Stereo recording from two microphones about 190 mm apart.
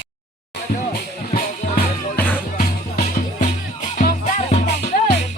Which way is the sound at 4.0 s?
45° left (ahead or behind).